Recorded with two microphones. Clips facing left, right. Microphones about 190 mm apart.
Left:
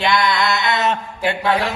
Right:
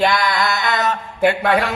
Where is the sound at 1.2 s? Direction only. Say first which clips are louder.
Right 5 dB; 60° right (ahead or behind).